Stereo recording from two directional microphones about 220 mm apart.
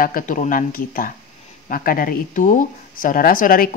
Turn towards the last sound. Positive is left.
turn(degrees=40)  # may be behind; listen again after turning